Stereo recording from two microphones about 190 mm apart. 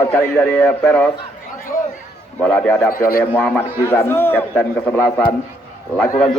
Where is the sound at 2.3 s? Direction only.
10° left (ahead or behind).